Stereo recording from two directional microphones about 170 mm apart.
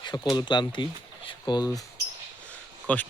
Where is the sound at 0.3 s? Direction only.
25° left (ahead or behind).